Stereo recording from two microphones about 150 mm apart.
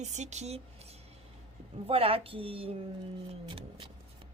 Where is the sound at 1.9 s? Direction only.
40° right (ahead or behind).